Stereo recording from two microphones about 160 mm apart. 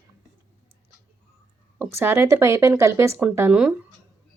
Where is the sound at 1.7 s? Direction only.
15° right (ahead or behind).